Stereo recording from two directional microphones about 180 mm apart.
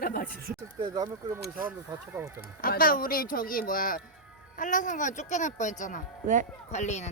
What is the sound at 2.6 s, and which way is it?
Speech, 55° left (ahead or behind).